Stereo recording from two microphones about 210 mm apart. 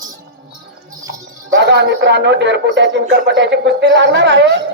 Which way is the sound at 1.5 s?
55° right (ahead or behind).